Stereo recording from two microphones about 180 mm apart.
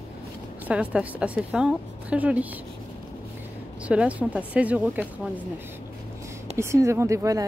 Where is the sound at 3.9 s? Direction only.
5° right (ahead or behind).